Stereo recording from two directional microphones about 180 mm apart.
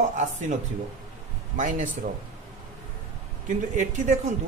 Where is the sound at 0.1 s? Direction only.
45° right (ahead or behind).